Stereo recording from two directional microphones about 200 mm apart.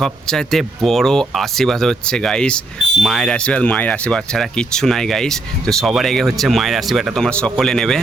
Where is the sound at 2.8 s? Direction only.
60° left (ahead or behind).